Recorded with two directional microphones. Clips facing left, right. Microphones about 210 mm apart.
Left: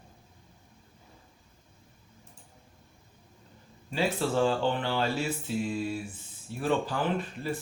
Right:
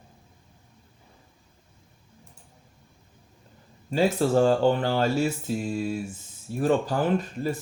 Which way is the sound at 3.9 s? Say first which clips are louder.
Right 6 dB; 40° right (ahead or behind).